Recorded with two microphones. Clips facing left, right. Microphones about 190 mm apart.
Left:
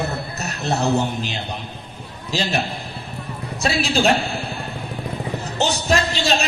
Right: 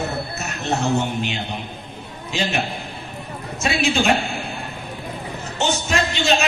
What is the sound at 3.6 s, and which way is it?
Speech, 35° left (ahead or behind).